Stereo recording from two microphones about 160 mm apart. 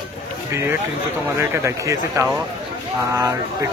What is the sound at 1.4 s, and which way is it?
A man's voice, 15° right (ahead or behind).